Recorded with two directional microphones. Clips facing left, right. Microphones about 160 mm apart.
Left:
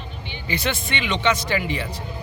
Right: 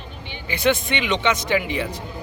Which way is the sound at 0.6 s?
15° right (ahead or behind).